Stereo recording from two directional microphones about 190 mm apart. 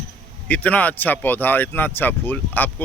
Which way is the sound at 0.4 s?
10° left (ahead or behind).